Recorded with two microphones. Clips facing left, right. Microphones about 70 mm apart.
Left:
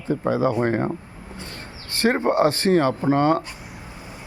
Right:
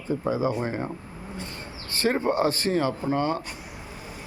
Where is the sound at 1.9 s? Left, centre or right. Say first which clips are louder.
Left 4 dB; left.